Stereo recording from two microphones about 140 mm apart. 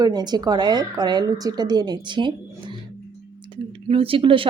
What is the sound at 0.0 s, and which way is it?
A woman's voice, 30° right (ahead or behind).